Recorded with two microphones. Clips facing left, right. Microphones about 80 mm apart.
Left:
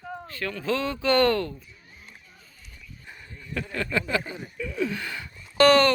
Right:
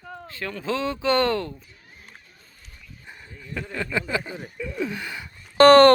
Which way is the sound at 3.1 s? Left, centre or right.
Centre.